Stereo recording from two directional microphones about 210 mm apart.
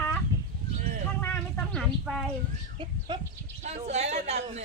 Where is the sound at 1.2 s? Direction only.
10° left (ahead or behind).